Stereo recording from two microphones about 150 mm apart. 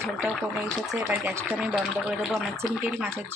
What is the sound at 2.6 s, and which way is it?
Speech, 15° right (ahead or behind).